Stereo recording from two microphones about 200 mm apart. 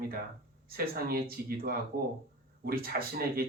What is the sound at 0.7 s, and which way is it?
Speech, 50° right (ahead or behind).